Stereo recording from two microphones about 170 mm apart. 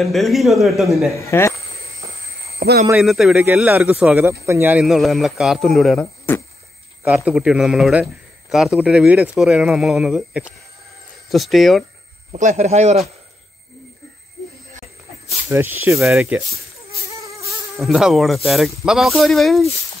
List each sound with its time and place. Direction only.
0.0 s a man's voice: centre (ahead or behind)
1.1 s speech: 15° left (ahead or behind)
2.6 s speech: 60° right (ahead or behind)
3.0 s a man's voice: centre (ahead or behind)
4.7 s a man's voice: centre (ahead or behind)
7.1 s a man's voice: 5° right (ahead or behind)
12.3 s speech: 45° right (ahead or behind)
15.5 s speech: 10° right (ahead or behind)
17.2 s insect: 20° right (ahead or behind)
17.7 s a man's voice: centre (ahead or behind)